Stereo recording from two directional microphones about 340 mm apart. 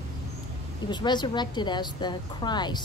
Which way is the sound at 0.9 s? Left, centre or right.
Centre.